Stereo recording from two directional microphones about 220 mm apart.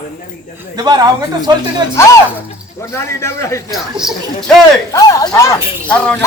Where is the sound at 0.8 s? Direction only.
20° right (ahead or behind).